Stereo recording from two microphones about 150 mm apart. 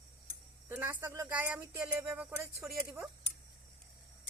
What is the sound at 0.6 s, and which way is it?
A man's voice, 15° right (ahead or behind).